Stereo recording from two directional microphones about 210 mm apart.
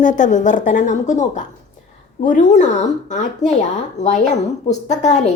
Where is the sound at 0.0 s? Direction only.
35° left (ahead or behind).